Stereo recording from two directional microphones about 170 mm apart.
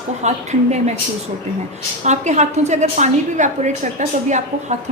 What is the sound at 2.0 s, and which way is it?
A woman's voice, 45° right (ahead or behind).